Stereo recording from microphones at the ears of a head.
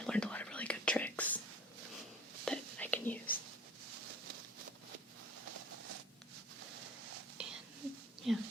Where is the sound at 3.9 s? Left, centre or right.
Right.